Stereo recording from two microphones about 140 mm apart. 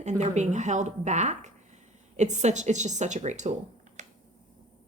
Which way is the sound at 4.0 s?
60° right (ahead or behind).